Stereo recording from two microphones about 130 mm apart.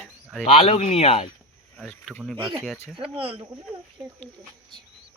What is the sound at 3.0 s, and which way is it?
Speech, 45° right (ahead or behind).